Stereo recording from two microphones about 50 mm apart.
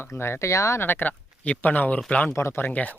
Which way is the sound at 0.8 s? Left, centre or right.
Left.